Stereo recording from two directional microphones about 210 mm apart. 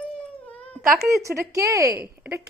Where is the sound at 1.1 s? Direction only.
15° right (ahead or behind).